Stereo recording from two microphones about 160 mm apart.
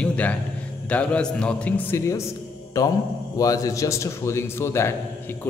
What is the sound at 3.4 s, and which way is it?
A man's voice, 20° left (ahead or behind).